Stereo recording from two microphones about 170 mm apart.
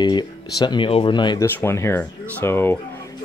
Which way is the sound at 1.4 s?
15° left (ahead or behind).